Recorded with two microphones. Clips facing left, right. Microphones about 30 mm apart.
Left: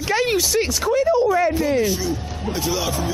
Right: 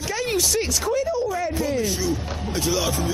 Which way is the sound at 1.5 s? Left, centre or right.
Centre.